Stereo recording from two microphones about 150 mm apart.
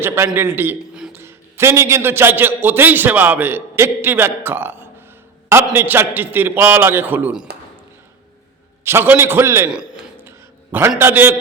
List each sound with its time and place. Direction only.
0.3 s a man's voice: 15° right (ahead or behind)
8.8 s a man's voice: 15° right (ahead or behind)
9.6 s a sound: 5° right (ahead or behind)